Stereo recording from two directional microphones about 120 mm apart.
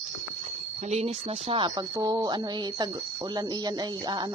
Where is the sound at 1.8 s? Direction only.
35° right (ahead or behind).